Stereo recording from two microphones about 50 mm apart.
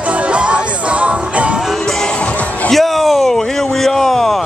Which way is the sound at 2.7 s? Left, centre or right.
Centre.